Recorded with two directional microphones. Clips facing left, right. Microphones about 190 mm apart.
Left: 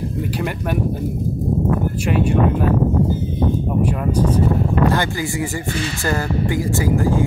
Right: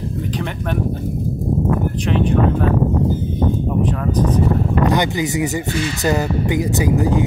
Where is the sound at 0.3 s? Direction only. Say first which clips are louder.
Even; 10° left (ahead or behind).